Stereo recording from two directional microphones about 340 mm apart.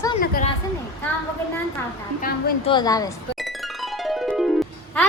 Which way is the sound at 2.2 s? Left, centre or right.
Left.